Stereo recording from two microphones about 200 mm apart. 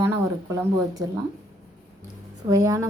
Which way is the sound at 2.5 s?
15° right (ahead or behind).